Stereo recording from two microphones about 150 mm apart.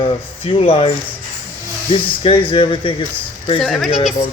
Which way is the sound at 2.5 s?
35° left (ahead or behind).